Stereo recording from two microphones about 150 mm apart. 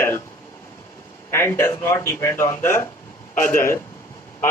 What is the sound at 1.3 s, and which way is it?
Speech, 20° left (ahead or behind).